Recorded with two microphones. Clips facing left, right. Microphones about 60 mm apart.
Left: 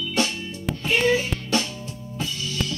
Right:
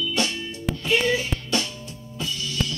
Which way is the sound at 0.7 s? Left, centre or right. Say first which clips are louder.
Left 1 dB; left.